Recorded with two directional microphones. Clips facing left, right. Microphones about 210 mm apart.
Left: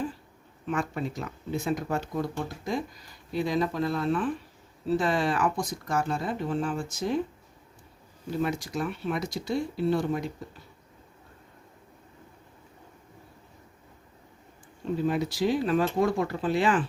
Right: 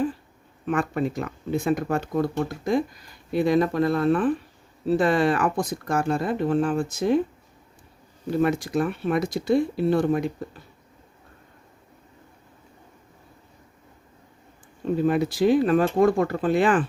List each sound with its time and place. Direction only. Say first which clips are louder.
0.7 s speech: right 6 dB; 55° right (ahead or behind)
8.3 s speech: right 7 dB; 60° right (ahead or behind)
14.8 s speech: right 5 dB; 55° right (ahead or behind)